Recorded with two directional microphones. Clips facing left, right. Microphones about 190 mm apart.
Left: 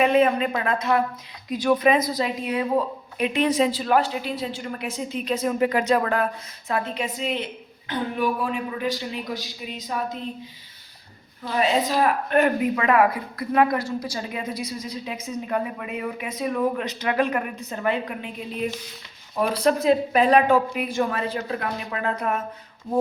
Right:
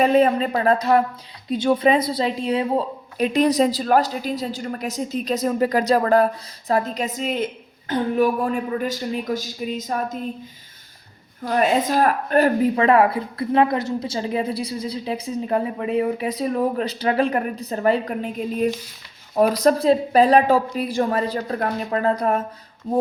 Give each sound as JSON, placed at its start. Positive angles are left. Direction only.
{"t": 0.0, "sound": "a woman's voice", "side_deg": -35}
{"t": 11.4, "sound": "a woman's voice", "side_deg": -45}